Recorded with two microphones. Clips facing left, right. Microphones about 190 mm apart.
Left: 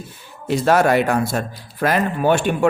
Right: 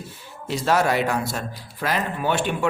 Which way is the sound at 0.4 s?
55° left (ahead or behind).